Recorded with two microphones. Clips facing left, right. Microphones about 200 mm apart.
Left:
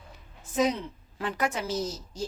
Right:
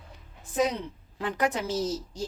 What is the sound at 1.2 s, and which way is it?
Speech, 15° right (ahead or behind).